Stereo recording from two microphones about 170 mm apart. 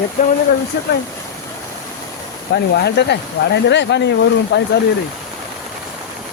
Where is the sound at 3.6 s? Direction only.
90° left.